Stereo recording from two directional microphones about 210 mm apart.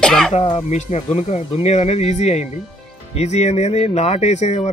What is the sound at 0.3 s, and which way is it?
Speech, 25° left (ahead or behind).